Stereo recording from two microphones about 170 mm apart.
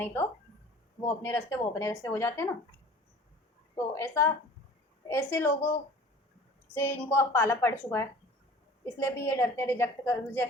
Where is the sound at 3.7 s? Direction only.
15° left (ahead or behind).